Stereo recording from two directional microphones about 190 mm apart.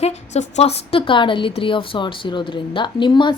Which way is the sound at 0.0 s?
35° left (ahead or behind).